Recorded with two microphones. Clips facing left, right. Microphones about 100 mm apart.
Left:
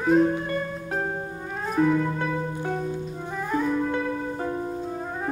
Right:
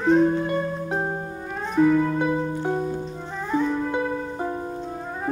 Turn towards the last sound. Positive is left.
turn(degrees=-15)  # may be behind; listen again after turning